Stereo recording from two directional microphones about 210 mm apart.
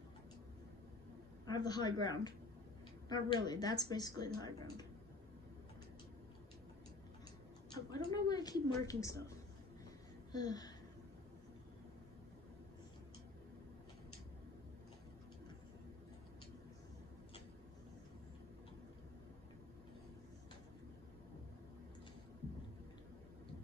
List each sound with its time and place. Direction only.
1.4 s speech: 20° left (ahead or behind)
7.7 s speech: 20° left (ahead or behind)
10.3 s a sound: 20° left (ahead or behind)